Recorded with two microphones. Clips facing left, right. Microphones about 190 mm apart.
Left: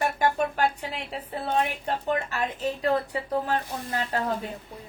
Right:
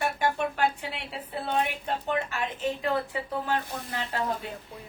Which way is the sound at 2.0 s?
40° left (ahead or behind).